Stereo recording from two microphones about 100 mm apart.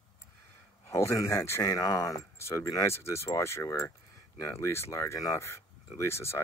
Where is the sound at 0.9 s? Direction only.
30° left (ahead or behind).